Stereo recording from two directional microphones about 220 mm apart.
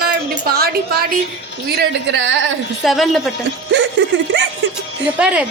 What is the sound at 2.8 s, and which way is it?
Speech, centre (ahead or behind).